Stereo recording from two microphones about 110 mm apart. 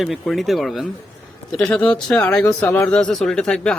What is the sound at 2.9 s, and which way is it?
Speech, 5° left (ahead or behind).